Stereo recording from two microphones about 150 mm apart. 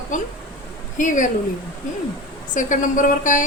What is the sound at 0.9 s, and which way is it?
Speech, 60° left (ahead or behind).